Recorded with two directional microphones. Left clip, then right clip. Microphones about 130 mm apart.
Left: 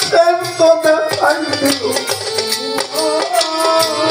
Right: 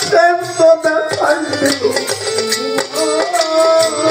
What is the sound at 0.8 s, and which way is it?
Music, 20° left (ahead or behind).